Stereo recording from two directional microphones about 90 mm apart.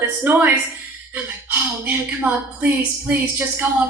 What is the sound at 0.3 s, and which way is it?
A woman's voice, 20° right (ahead or behind).